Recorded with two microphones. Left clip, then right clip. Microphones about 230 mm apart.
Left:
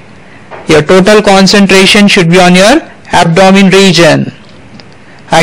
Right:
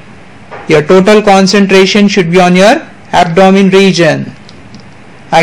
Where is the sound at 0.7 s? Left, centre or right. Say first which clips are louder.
Left 1 dB; left.